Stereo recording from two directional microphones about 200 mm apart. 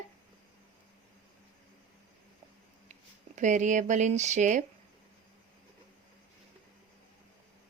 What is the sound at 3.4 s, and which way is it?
A woman's voice, 40° right (ahead or behind).